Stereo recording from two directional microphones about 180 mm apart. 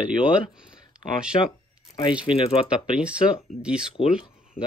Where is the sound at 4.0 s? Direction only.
35° left (ahead or behind).